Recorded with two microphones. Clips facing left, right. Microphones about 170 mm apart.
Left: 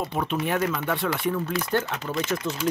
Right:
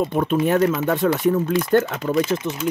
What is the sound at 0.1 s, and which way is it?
Speech, 45° right (ahead or behind).